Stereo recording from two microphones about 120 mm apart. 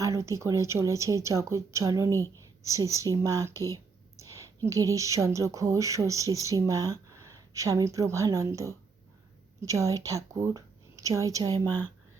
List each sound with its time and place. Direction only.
0.0 s a woman's voice: 25° right (ahead or behind)